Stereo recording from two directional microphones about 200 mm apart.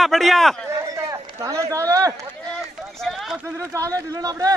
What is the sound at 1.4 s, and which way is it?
Speech, 15° right (ahead or behind).